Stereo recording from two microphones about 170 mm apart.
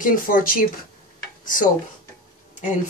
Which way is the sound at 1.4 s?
55° left (ahead or behind).